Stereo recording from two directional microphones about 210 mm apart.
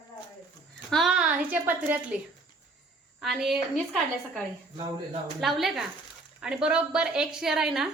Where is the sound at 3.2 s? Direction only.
Centre (ahead or behind).